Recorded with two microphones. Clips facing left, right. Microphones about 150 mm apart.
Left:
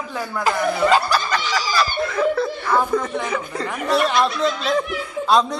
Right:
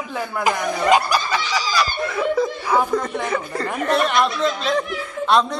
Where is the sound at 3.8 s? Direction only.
Centre (ahead or behind).